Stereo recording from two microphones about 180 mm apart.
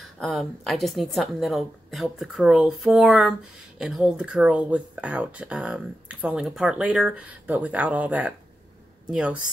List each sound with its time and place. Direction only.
0.2 s a woman's voice: centre (ahead or behind)